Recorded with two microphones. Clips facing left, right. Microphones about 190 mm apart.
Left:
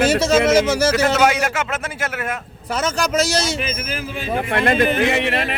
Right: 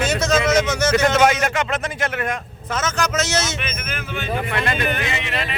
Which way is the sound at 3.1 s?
35° left (ahead or behind).